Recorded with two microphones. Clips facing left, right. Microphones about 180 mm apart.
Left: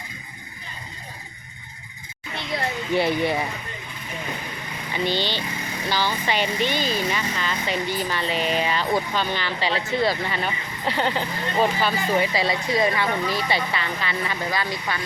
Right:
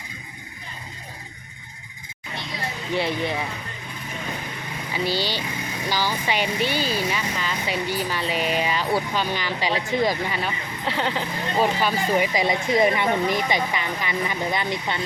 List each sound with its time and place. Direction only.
2.5 s music: 60° left (ahead or behind)
2.9 s speech: centre (ahead or behind)
5.0 s speech: 10° right (ahead or behind)
10.4 s speech: centre (ahead or behind)
11.8 s speech: 10° right (ahead or behind)